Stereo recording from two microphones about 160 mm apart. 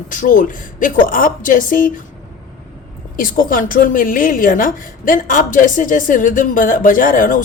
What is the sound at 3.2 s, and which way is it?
A woman's voice, 60° left (ahead or behind).